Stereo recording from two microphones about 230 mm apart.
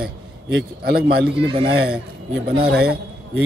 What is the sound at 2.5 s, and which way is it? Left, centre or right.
Speech, right.